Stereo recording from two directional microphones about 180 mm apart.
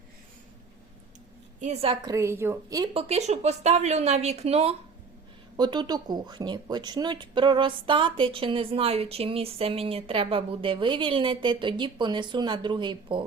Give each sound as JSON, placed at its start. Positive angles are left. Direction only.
{"t": 1.6, "sound": "speech", "side_deg": -35}
{"t": 2.0, "sound": "a woman's voice", "side_deg": -15}
{"t": 2.9, "sound": "speech", "side_deg": -35}
{"t": 5.5, "sound": "speech", "side_deg": -25}